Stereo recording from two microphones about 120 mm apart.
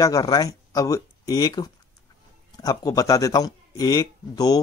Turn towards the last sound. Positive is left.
turn(degrees=35)  # may be behind; listen again after turning